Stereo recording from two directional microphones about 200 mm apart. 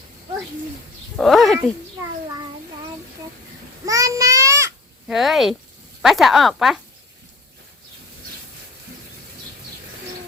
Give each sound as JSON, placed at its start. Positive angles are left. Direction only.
{"t": 1.1, "sound": "speech", "side_deg": 0}
{"t": 3.8, "sound": "child singing", "side_deg": -15}
{"t": 5.0, "sound": "speech", "side_deg": 0}